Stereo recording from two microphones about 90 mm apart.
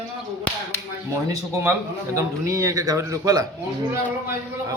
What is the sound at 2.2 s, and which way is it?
A man's voice, 35° right (ahead or behind).